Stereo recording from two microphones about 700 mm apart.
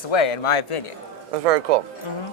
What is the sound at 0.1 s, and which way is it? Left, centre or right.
Speech, left.